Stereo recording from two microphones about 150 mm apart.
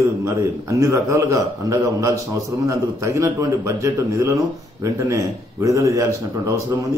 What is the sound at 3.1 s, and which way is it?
A man's voice, 20° right (ahead or behind).